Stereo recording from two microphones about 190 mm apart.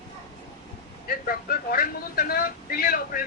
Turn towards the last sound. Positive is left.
turn(degrees=50)  # may be behind; listen again after turning